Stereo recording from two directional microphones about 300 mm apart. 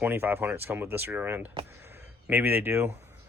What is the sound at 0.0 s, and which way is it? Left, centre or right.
Speech, centre.